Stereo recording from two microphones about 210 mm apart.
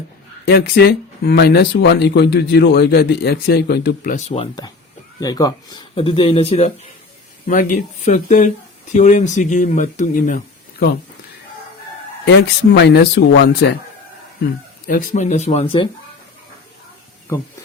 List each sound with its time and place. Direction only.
0.4 s speech: 50° left (ahead or behind); by 6.7 s 30° left (ahead or behind)
7.4 s speech: 40° left (ahead or behind)
12.2 s speech: 55° left (ahead or behind)
14.8 s speech: 40° left (ahead or behind)